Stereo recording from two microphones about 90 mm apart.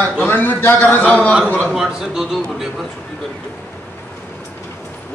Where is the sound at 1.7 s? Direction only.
5° right (ahead or behind).